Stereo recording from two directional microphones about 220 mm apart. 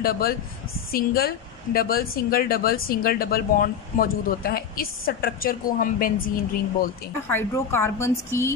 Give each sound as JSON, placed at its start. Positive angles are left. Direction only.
{"t": 0.0, "sound": "speech", "side_deg": 45}
{"t": 7.2, "sound": "a woman's voice", "side_deg": 10}